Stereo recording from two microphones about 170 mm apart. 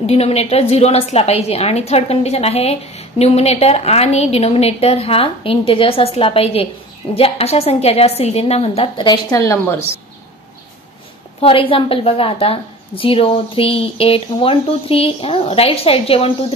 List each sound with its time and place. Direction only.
0.0 s a woman's voice: 40° left (ahead or behind); by 9.8 s 20° left (ahead or behind)
11.4 s a woman's voice: 30° left (ahead or behind)